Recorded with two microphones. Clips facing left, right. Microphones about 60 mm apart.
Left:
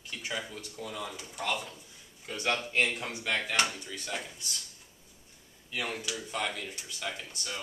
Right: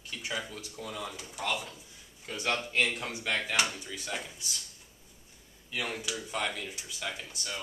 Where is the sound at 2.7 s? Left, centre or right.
Left.